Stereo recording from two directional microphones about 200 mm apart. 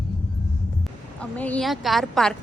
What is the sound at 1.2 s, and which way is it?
A woman's voice, 5° left (ahead or behind).